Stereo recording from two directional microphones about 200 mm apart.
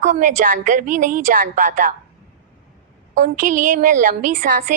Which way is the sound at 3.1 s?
40° right (ahead or behind).